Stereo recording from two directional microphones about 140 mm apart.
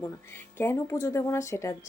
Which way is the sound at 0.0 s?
15° left (ahead or behind).